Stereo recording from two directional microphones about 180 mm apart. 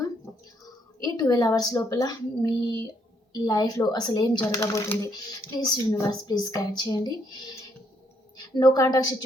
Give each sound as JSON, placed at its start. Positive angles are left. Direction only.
{"t": 1.0, "sound": "a woman's voice", "side_deg": 20}